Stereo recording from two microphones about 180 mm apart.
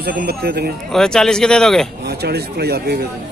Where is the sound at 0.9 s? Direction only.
Centre (ahead or behind).